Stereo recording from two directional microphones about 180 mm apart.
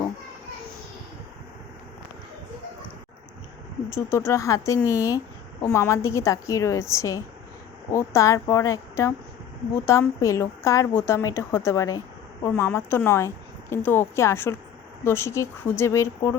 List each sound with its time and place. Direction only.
3.8 s a woman's voice: 15° left (ahead or behind)